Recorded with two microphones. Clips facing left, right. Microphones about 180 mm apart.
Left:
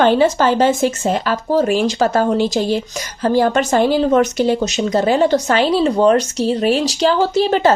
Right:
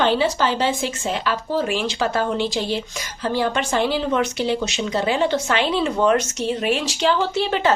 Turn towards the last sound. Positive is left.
turn(degrees=40)  # may be behind; listen again after turning